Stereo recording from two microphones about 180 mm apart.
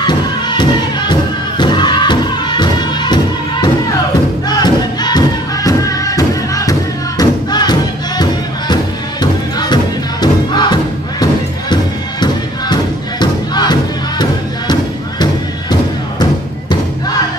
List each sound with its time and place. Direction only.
0.0 s music: 25° left (ahead or behind)
4.5 s thump: 20° left (ahead or behind)
9.2 s music: 25° left (ahead or behind)